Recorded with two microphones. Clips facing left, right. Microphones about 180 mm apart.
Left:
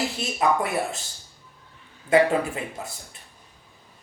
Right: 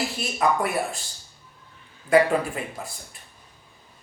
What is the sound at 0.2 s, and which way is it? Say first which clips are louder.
Speech: even; 25° left (ahead or behind).